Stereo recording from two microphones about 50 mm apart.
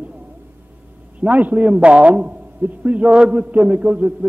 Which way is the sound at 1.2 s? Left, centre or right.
Right.